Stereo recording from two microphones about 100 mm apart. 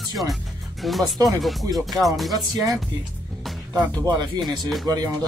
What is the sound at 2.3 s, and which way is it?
Speech, 35° right (ahead or behind).